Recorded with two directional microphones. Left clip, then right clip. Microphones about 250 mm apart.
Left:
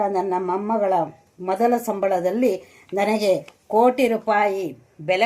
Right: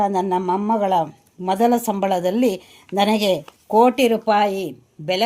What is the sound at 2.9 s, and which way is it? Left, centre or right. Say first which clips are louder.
Speech: right 1 dB; right.